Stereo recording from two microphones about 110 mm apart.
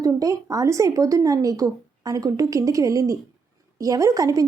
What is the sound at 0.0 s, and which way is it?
A woman's voice, 30° right (ahead or behind).